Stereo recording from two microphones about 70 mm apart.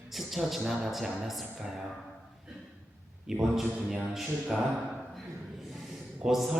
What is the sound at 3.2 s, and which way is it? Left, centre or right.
A man's voice, centre.